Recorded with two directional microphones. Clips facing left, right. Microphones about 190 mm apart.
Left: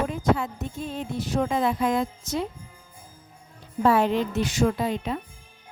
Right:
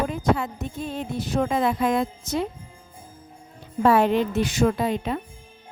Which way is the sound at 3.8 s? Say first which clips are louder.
Right 2 dB; 60° right (ahead or behind).